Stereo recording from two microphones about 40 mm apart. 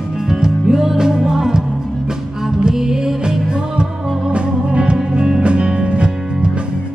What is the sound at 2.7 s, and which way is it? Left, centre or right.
Music, centre.